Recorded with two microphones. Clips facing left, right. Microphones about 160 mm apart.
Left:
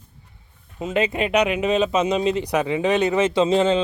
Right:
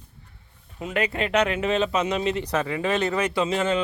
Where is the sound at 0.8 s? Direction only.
20° left (ahead or behind).